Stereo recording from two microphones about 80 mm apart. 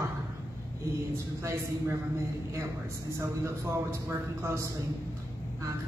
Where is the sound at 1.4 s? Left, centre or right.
Right.